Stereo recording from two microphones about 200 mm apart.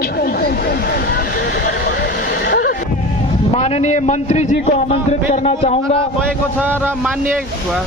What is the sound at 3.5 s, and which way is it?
A man's voice, 35° left (ahead or behind).